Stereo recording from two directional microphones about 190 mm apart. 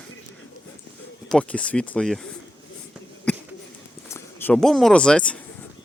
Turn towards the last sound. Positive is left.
turn(degrees=5)  # may be behind; listen again after turning